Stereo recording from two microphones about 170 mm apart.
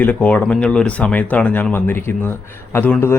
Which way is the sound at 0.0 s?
10° left (ahead or behind).